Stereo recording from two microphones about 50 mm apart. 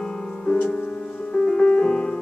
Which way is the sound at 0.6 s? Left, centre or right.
Left.